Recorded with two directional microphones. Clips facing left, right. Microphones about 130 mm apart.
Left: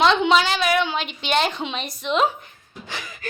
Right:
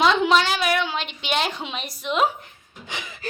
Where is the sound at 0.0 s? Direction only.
5° right (ahead or behind).